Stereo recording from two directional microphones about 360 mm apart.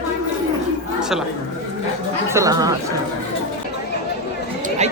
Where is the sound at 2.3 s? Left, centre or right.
Centre.